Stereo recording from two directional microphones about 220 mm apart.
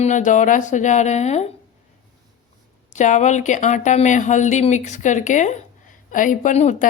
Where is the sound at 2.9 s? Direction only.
35° left (ahead or behind).